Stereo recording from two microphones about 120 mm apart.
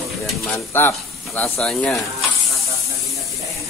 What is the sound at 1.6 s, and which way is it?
Speech, 5° left (ahead or behind).